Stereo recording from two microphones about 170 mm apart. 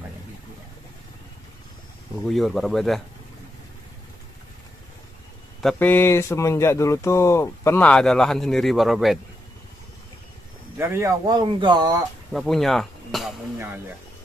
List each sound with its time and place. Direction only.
2.2 s speech: centre (ahead or behind)
5.6 s speech: 5° left (ahead or behind)
10.8 s speech: 15° right (ahead or behind)
12.3 s speech: centre (ahead or behind)